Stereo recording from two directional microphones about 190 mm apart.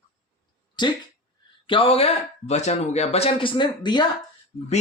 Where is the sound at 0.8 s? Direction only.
25° left (ahead or behind).